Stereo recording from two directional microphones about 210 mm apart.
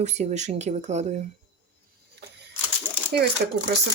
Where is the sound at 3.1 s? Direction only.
50° right (ahead or behind).